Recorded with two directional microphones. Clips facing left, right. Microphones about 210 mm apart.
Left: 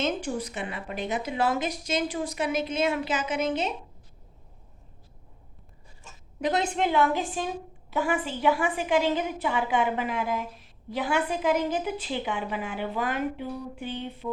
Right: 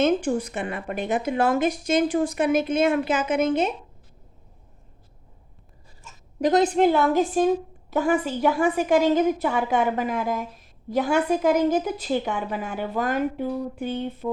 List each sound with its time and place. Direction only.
0.0 s a woman's voice: 50° right (ahead or behind)
6.4 s a woman's voice: 40° right (ahead or behind)